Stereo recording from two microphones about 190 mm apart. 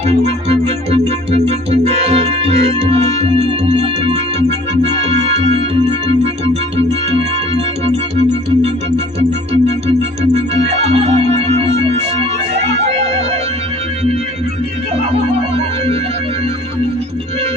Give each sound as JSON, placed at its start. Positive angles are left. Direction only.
{"t": 0.2, "sound": "music", "side_deg": -35}
{"t": 9.5, "sound": "music", "side_deg": -35}